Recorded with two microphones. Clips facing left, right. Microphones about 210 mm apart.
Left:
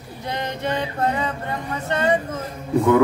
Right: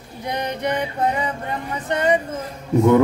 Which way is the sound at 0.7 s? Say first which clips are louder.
Right 1 dB; 15° right (ahead or behind).